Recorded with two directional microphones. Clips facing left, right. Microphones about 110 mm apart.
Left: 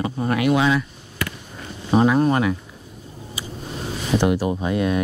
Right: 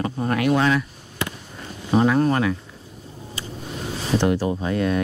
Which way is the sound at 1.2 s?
25° right (ahead or behind).